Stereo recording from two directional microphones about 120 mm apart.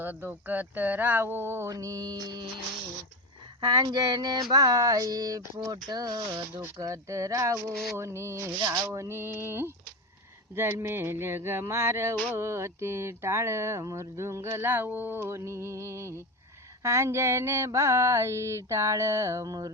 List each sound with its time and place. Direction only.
0.0 s speech: 15° right (ahead or behind); by 2.5 s 35° right (ahead or behind)
3.6 s speech: 35° right (ahead or behind)
5.9 s a sound: 35° right (ahead or behind)